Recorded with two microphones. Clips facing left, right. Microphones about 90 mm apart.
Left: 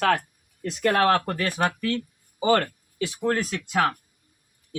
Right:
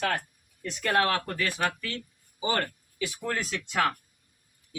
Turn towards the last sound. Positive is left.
turn(degrees=20)  # may be behind; listen again after turning